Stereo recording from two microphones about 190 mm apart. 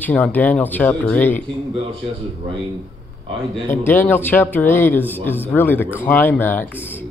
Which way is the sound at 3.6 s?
10° left (ahead or behind).